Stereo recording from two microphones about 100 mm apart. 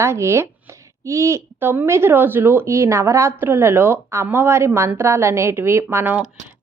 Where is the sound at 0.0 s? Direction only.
25° right (ahead or behind).